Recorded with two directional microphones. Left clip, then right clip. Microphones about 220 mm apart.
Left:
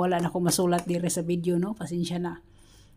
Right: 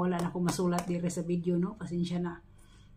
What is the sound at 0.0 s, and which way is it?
A woman's voice, 45° left (ahead or behind).